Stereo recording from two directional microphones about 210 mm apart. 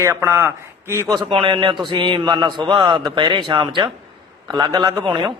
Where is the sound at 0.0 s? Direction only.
10° right (ahead or behind).